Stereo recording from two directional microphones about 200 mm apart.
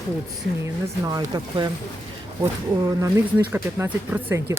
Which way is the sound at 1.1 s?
20° right (ahead or behind).